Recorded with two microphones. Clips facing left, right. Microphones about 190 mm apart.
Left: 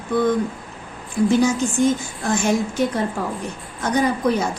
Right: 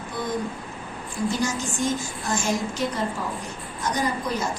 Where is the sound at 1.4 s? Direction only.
60° left (ahead or behind).